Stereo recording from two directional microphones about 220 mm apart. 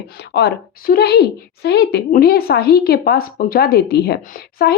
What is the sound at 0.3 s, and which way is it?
A woman's voice, 50° left (ahead or behind).